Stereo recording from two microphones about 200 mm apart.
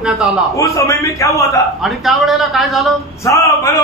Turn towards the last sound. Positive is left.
turn(degrees=15)  # may be behind; listen again after turning